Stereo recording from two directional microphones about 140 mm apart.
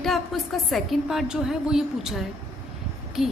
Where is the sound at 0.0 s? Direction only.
Centre (ahead or behind).